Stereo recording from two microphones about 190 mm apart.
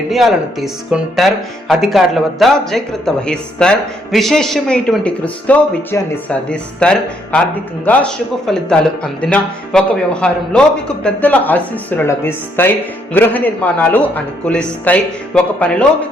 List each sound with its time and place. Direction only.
0.1 s a man's voice: centre (ahead or behind)